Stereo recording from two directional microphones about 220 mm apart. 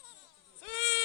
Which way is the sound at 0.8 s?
50° left (ahead or behind).